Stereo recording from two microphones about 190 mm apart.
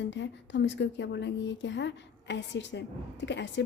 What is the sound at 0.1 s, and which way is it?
Speech, 70° left (ahead or behind).